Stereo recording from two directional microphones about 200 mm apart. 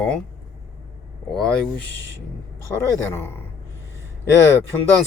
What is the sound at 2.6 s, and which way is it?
Speech, 15° left (ahead or behind).